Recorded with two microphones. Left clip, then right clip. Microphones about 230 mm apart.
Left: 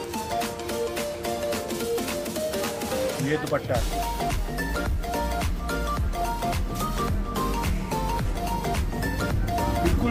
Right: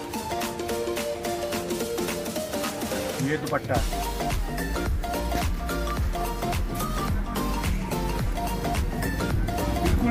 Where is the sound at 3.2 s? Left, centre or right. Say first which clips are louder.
Left 1 dB; centre.